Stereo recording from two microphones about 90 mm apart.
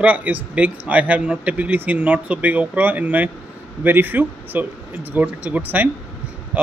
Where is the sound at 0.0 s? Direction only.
15° right (ahead or behind).